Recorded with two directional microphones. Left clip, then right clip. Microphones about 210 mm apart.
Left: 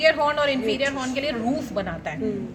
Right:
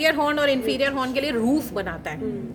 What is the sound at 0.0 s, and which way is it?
A woman's voice, 55° right (ahead or behind).